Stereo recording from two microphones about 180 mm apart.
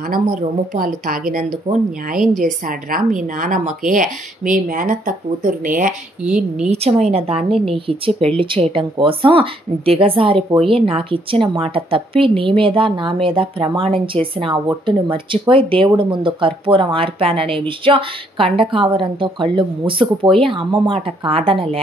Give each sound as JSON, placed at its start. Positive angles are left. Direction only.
{"t": 0.1, "sound": "a woman's voice", "side_deg": -50}
{"t": 6.2, "sound": "speech", "side_deg": -5}
{"t": 6.7, "sound": "speech", "side_deg": -35}